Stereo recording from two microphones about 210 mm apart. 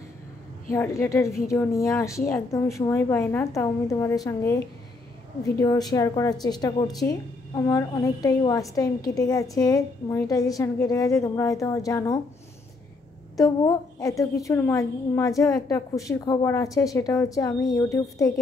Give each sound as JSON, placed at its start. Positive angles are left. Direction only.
{"t": 0.7, "sound": "a woman's voice", "side_deg": 15}
{"t": 13.4, "sound": "a woman's voice", "side_deg": 15}